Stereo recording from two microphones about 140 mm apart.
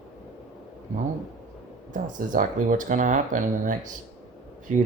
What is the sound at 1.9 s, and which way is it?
Speech, 70° right (ahead or behind).